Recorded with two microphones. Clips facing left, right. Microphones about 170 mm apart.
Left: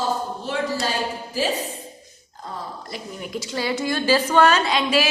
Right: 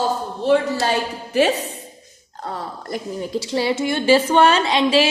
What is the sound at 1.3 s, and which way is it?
Speech, 70° right (ahead or behind).